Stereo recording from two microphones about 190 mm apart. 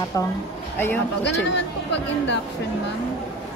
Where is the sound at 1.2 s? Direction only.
65° left (ahead or behind).